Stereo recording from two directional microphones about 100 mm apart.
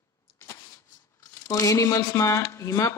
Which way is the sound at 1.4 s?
35° left (ahead or behind).